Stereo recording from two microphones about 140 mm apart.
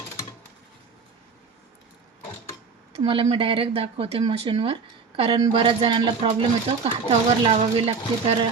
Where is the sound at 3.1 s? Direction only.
40° right (ahead or behind).